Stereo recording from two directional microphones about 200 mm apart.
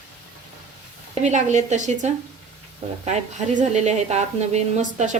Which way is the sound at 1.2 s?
35° right (ahead or behind).